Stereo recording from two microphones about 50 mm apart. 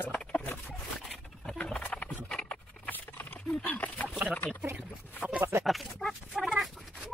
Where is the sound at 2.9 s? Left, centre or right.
Left.